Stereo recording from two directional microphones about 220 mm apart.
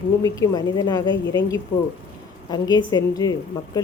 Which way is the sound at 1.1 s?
55° left (ahead or behind).